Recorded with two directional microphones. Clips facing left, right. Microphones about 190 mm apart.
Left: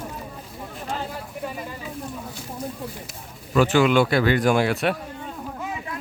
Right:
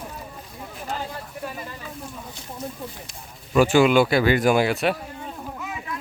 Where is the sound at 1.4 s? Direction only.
5° left (ahead or behind).